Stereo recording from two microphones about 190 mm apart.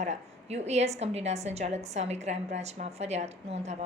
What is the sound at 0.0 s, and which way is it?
A woman's voice, 35° right (ahead or behind).